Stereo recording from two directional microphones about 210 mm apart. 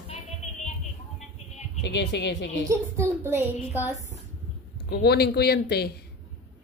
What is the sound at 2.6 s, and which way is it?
A woman's voice, 15° right (ahead or behind).